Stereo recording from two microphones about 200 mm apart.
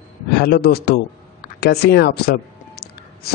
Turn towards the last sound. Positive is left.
turn(degrees=50)  # may be behind; listen again after turning